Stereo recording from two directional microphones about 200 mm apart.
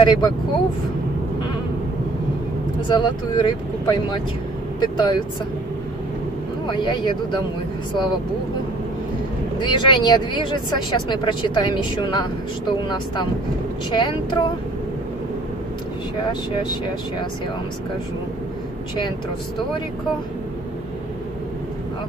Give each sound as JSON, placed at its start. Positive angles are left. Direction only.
{"t": 0.0, "sound": "speech", "side_deg": 20}
{"t": 2.9, "sound": "speech", "side_deg": 25}
{"t": 6.7, "sound": "speech", "side_deg": 20}
{"t": 9.6, "sound": "speech", "side_deg": 25}